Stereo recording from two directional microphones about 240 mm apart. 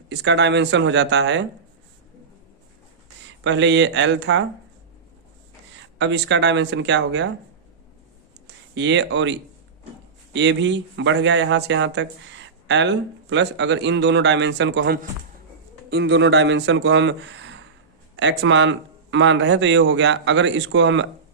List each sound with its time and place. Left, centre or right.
0.1 s speech: right
3.4 s speech: right
5.7 s speech: right
8.7 s speech: right